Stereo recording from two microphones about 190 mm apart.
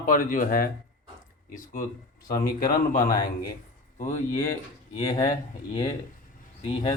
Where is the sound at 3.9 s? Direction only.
40° left (ahead or behind).